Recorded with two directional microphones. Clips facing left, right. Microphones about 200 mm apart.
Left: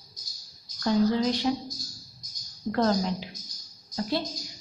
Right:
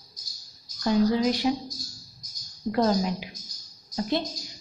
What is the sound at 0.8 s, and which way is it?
Speech, 15° right (ahead or behind).